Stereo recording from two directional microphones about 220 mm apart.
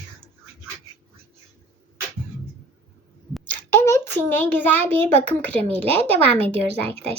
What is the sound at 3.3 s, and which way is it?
A child's voice, 10° left (ahead or behind).